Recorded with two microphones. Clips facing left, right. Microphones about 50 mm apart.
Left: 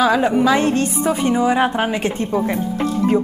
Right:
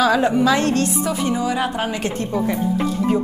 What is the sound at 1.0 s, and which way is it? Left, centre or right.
Speech, left.